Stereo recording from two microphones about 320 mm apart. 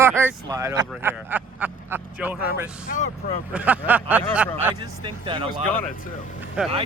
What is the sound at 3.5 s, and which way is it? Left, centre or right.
Speech, centre.